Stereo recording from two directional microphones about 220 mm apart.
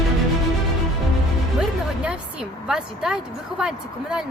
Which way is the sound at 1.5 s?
5° right (ahead or behind).